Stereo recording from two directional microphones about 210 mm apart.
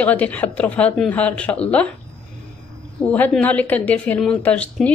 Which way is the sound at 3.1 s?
5° left (ahead or behind).